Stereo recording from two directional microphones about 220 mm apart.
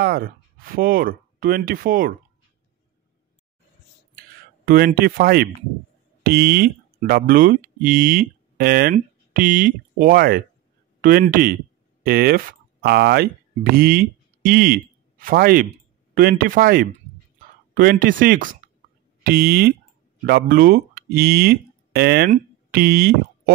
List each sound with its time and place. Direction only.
0.0 s speech: 45° right (ahead or behind)
4.6 s speech: 40° right (ahead or behind)